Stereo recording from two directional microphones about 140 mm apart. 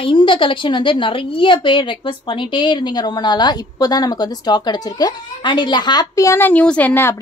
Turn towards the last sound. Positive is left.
turn(degrees=15)  # may be behind; listen again after turning